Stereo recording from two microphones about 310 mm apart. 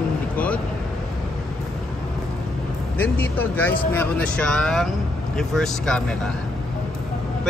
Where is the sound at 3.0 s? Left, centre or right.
Centre.